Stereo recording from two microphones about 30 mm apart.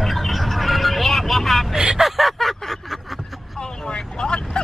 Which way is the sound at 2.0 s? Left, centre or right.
Centre.